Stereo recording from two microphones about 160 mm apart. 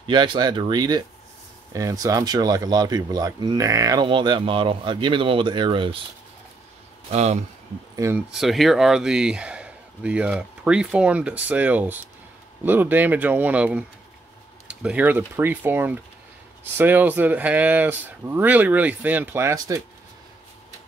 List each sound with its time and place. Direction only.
0.0 s speech: 30° right (ahead or behind)
7.1 s speech: 45° right (ahead or behind)
7.9 s speech: 20° right (ahead or behind)
8.3 s speech: centre (ahead or behind); by 19.8 s 20° right (ahead or behind)